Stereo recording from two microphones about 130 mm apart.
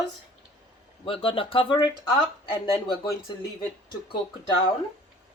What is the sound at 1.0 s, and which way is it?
Speech, 45° left (ahead or behind).